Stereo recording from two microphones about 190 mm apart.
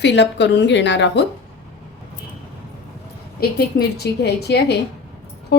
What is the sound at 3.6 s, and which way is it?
A woman's voice, 60° left (ahead or behind).